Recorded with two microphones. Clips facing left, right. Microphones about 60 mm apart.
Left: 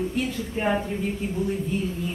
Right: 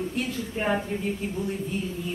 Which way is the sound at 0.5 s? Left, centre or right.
Centre.